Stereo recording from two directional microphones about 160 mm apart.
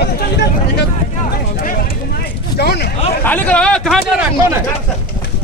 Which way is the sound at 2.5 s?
85° left.